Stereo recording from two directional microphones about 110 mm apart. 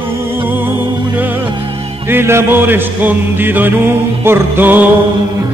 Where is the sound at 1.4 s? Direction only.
50° right (ahead or behind).